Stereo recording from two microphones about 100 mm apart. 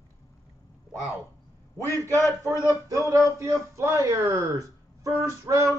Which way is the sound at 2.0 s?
30° right (ahead or behind).